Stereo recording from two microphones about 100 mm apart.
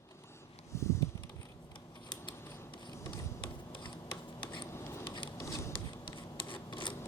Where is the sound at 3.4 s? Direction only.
50° left (ahead or behind).